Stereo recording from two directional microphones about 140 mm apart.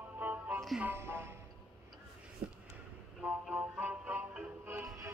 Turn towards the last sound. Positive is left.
turn(degrees=-15)  # may be behind; listen again after turning